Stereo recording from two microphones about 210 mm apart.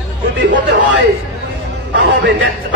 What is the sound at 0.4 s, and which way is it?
Speech, 65° right (ahead or behind).